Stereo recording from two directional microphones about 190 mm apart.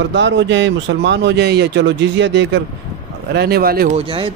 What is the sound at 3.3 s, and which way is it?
Speech, 55° right (ahead or behind).